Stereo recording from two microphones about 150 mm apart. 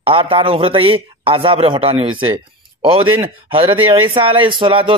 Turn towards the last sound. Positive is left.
turn(degrees=-35)  # may be behind; listen again after turning